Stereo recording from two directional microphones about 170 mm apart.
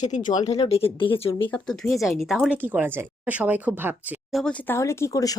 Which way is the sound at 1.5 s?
5° left (ahead or behind).